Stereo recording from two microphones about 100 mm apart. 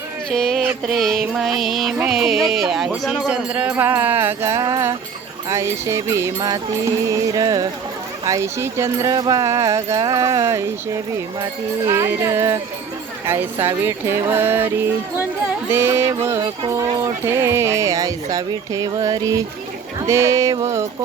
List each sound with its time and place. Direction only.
0.3 s music: 5° left (ahead or behind)
2.0 s speech: 5° right (ahead or behind); by 20.6 s 30° right (ahead or behind)